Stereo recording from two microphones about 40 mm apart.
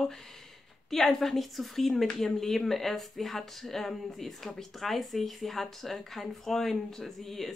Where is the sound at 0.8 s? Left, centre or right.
Centre.